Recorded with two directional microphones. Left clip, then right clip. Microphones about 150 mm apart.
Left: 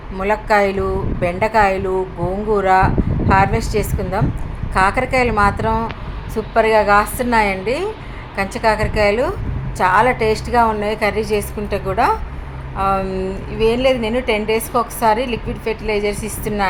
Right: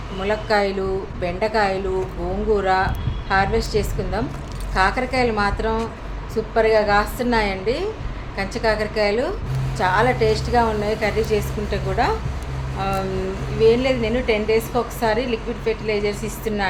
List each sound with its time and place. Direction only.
0.2 s a woman's voice: 25° left (ahead or behind)